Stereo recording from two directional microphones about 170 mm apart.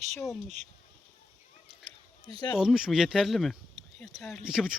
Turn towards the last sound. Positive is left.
turn(degrees=-5)  # may be behind; listen again after turning